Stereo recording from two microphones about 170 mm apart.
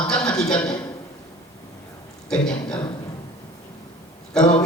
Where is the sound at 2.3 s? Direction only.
5° left (ahead or behind).